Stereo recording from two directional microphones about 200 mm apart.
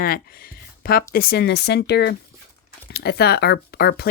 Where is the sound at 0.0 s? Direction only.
45° left (ahead or behind).